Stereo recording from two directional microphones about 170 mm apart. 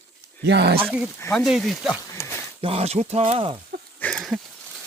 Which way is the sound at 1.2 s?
10° left (ahead or behind).